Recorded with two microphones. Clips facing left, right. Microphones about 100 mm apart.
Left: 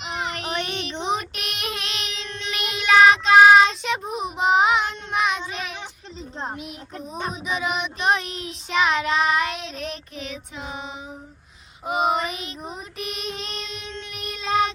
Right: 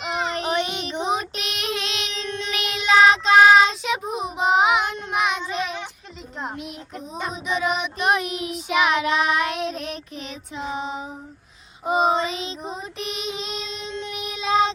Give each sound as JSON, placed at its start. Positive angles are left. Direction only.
{"t": 0.0, "sound": "child singing", "side_deg": -30}
{"t": 0.5, "sound": "child singing", "side_deg": -15}
{"t": 0.9, "sound": "child singing", "side_deg": -5}
{"t": 10.7, "sound": "child singing", "side_deg": -35}
{"t": 12.7, "sound": "child singing", "side_deg": 0}
{"t": 13.7, "sound": "child singing", "side_deg": -30}
{"t": 14.1, "sound": "child singing", "side_deg": 0}